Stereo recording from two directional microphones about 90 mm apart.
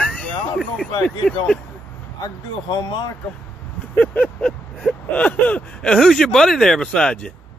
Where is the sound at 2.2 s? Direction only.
55° left (ahead or behind).